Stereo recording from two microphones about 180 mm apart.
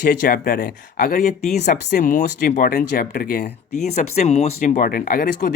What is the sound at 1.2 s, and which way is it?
Speech, 40° left (ahead or behind).